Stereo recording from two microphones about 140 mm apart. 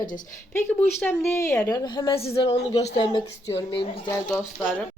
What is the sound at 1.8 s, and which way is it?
Speech, 30° left (ahead or behind).